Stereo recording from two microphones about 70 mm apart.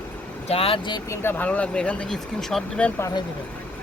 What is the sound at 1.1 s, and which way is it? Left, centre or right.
Speech, left.